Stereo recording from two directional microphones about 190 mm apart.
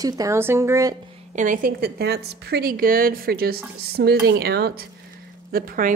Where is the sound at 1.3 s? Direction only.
45° right (ahead or behind).